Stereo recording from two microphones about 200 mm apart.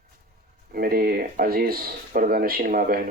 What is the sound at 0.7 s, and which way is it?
Speech, 50° right (ahead or behind).